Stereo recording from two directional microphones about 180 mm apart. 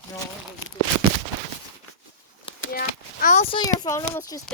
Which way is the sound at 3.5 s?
20° left (ahead or behind).